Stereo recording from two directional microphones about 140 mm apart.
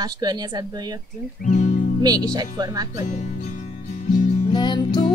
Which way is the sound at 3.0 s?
55° left (ahead or behind).